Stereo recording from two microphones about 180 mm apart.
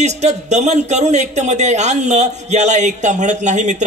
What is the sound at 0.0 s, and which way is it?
A man's voice, 40° right (ahead or behind).